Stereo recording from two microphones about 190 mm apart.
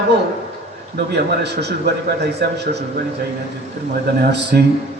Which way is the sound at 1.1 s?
60° right (ahead or behind).